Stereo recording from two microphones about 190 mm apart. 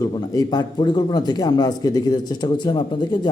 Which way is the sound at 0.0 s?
20° left (ahead or behind).